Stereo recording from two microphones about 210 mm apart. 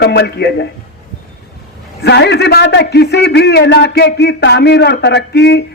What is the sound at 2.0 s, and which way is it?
A man's voice, 55° left (ahead or behind).